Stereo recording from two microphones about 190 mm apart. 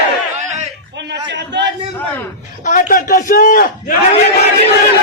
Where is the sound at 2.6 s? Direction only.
45° left (ahead or behind).